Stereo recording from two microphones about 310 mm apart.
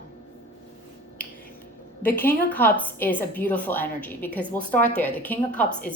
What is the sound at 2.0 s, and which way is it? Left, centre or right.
A woman's voice, centre.